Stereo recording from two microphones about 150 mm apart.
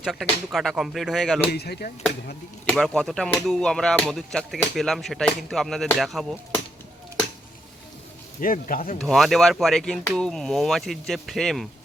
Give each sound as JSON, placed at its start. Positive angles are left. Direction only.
{"t": 0.0, "sound": "speech", "side_deg": 0}
{"t": 1.5, "sound": "speech", "side_deg": 90}
{"t": 2.6, "sound": "speech", "side_deg": 5}
{"t": 8.4, "sound": "speech", "side_deg": 65}
{"t": 9.0, "sound": "speech", "side_deg": 0}